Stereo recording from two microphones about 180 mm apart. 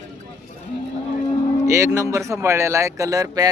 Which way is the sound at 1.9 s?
15° right (ahead or behind).